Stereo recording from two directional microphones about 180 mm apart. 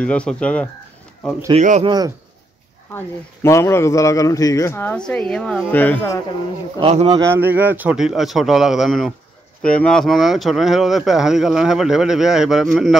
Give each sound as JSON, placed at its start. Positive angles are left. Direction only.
{"t": 0.0, "sound": "speech", "side_deg": 5}
{"t": 1.5, "sound": "speech", "side_deg": -40}
{"t": 1.9, "sound": "speech", "side_deg": -20}
{"t": 3.4, "sound": "speech", "side_deg": 15}
{"t": 6.8, "sound": "speech", "side_deg": -35}
{"t": 7.2, "sound": "speech", "side_deg": -15}